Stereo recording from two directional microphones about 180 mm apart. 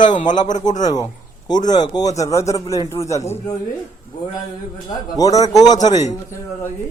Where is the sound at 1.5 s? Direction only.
20° left (ahead or behind).